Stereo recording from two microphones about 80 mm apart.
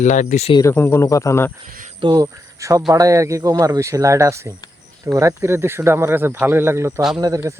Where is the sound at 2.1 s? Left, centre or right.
Right.